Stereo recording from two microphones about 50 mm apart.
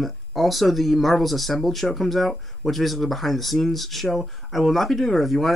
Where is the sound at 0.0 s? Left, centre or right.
Centre.